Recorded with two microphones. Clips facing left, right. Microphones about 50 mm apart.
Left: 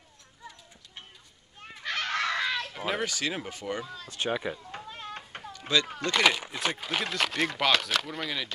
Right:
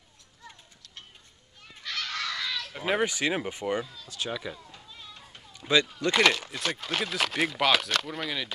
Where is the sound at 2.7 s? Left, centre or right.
Centre.